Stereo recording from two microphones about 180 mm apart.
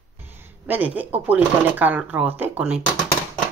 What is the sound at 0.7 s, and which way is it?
Speech, 10° right (ahead or behind).